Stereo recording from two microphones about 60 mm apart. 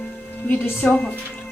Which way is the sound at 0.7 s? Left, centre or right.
Left.